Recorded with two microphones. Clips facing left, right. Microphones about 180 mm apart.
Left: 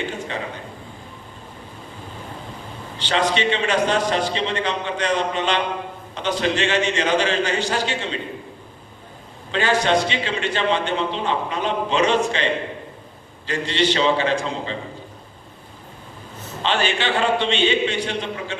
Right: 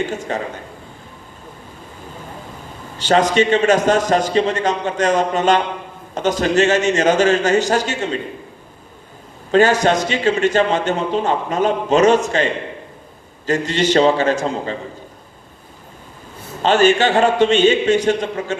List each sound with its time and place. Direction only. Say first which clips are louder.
0.0 s a man's voice: right 5 dB; 45° right (ahead or behind)
3.0 s a man's voice: right 6 dB; 45° right (ahead or behind)
9.5 s a man's voice: right 6 dB; 45° right (ahead or behind)
13.5 s a man's voice: right 5 dB; 45° right (ahead or behind)
16.6 s a man's voice: right 9 dB; 45° right (ahead or behind)